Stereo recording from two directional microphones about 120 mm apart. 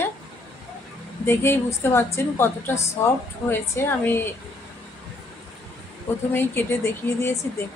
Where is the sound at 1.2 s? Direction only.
20° left (ahead or behind).